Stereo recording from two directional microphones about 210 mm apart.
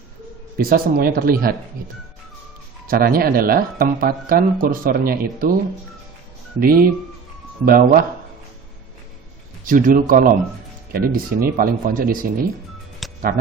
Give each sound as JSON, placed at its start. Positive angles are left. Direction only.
{"t": 0.6, "sound": "speech", "side_deg": -45}
{"t": 2.8, "sound": "speech", "side_deg": -40}
{"t": 6.6, "sound": "speech", "side_deg": -45}
{"t": 9.6, "sound": "speech", "side_deg": -40}
{"t": 13.0, "sound": "music", "side_deg": 0}